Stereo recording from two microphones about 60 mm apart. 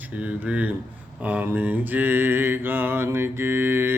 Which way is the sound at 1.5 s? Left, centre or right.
Right.